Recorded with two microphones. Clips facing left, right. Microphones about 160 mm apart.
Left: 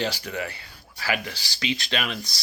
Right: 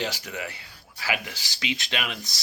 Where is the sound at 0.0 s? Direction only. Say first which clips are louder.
Left 3 dB; 10° right (ahead or behind).